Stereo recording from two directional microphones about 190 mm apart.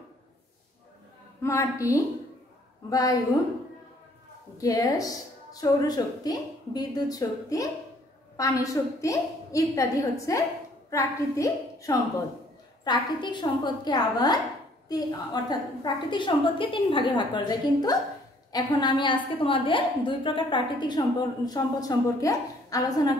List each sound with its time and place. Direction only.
1.4 s a woman's voice: 15° left (ahead or behind)
4.6 s a woman's voice: 20° left (ahead or behind)